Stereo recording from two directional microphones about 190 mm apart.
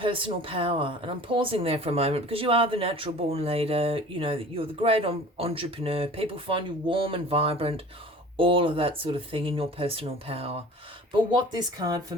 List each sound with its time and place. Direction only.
0.0 s speech: 25° right (ahead or behind)